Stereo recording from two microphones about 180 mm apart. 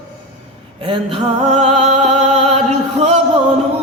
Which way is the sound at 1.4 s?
40° right (ahead or behind).